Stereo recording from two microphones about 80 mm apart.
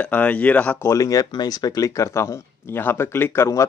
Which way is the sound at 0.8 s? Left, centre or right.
Left.